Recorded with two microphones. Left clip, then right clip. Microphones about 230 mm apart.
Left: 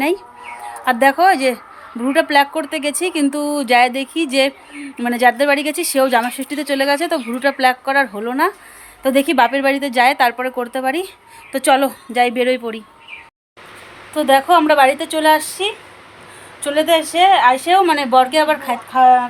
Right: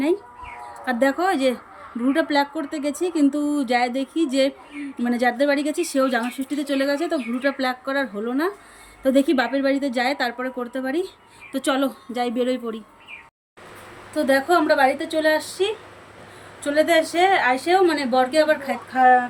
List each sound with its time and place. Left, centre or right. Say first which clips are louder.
0.9 s speech: left 8 dB; centre
14.2 s speech: left 6 dB; centre